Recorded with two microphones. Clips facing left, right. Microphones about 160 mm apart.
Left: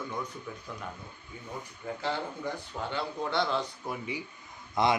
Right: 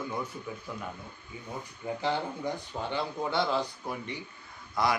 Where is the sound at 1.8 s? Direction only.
15° right (ahead or behind); by 4.2 s 5° left (ahead or behind).